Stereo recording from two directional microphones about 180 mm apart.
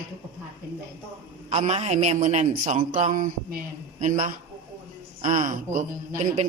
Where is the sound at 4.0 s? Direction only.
45° right (ahead or behind).